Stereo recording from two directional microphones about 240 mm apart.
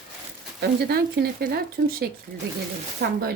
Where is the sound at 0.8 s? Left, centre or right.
Right.